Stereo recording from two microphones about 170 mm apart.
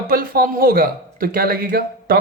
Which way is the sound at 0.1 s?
60° right (ahead or behind).